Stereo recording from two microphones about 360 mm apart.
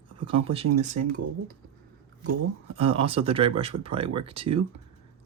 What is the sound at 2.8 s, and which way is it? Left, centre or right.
Speech, centre.